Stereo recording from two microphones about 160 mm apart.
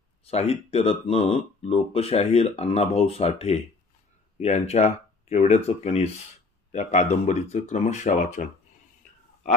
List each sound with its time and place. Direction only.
0.2 s speech: 40° left (ahead or behind)